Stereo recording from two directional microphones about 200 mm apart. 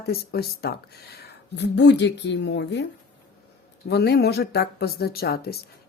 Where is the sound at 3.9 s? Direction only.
55° left (ahead or behind).